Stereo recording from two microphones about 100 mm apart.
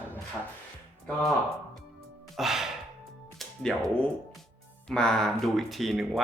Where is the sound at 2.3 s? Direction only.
5° right (ahead or behind).